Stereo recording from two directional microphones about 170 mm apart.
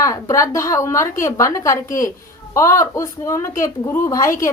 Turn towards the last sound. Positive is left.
turn(degrees=15)  # may be behind; listen again after turning